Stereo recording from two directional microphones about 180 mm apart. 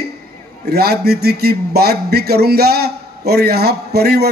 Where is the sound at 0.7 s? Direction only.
60° right (ahead or behind).